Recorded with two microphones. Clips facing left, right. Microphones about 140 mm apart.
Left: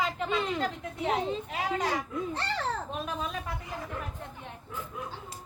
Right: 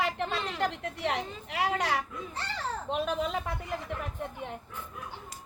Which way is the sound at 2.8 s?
75° right (ahead or behind).